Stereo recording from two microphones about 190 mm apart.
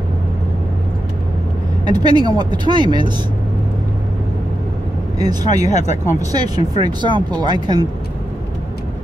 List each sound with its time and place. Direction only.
1.9 s speech: 20° right (ahead or behind)
5.6 s speech: 40° left (ahead or behind)
6.3 s speech: 20° right (ahead or behind)